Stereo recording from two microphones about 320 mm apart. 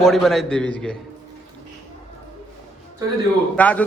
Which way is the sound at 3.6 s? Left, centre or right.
Centre.